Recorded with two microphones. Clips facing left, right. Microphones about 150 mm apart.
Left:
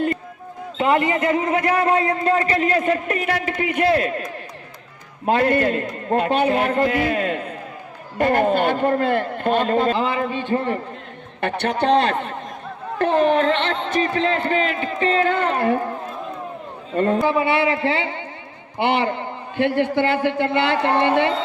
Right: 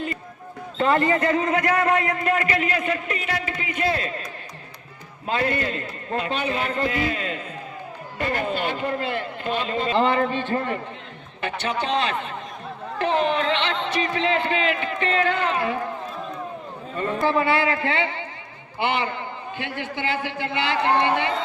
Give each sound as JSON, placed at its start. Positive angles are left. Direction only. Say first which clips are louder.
{"t": 0.8, "sound": "a man's voice", "louder": "left 1 dB", "side_deg": 15}
{"t": 9.9, "sound": "a man's voice", "louder": "right 1 dB", "side_deg": 5}
{"t": 11.3, "sound": "a man's voice", "louder": "left 5 dB", "side_deg": 60}
{"t": 16.9, "sound": "a man's voice", "louder": "left 8 dB", "side_deg": 45}
{"t": 17.2, "sound": "a man's voice", "louder": "left 2 dB", "side_deg": 15}
{"t": 18.8, "sound": "a man's voice", "louder": "left 5 dB", "side_deg": 60}